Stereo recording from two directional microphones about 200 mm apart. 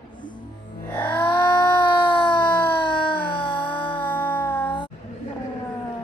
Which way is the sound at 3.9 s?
5° left (ahead or behind).